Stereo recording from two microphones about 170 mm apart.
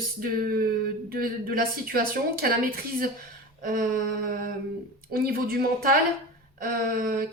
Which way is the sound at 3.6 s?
55° right (ahead or behind).